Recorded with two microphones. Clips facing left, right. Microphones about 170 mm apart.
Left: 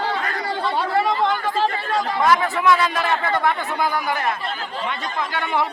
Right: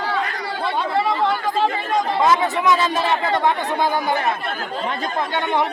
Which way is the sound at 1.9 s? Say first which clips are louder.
Right 1 dB; 20° right (ahead or behind).